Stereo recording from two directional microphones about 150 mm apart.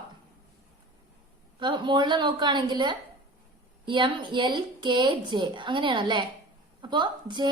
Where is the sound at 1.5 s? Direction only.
35° right (ahead or behind).